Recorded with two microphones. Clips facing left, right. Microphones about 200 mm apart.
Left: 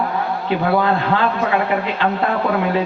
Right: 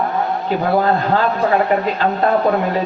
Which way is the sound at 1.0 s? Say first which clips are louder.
Right 2 dB; 40° right (ahead or behind).